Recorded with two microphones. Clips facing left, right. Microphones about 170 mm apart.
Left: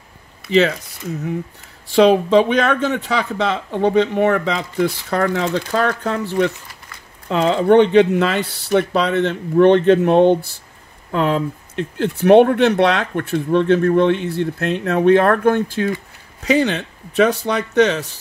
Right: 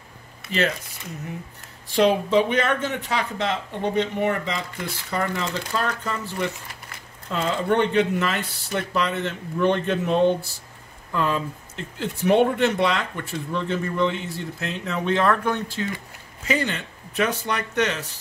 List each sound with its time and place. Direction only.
2.0 s speech: 90° left; by 15.9 s 55° left (ahead or behind)
16.4 s speech: 90° left